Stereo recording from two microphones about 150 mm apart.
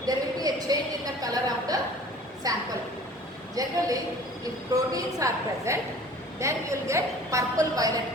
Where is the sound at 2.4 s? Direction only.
25° right (ahead or behind).